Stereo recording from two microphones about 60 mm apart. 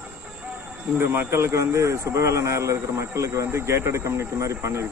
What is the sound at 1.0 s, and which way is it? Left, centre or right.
A man's voice, right.